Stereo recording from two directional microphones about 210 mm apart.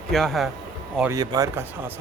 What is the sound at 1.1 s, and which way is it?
Speech, 15° right (ahead or behind).